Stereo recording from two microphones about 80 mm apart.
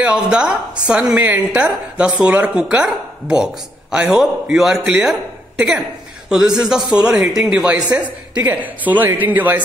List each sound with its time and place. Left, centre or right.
0.0 s speech: centre
6.2 s a woman's voice: centre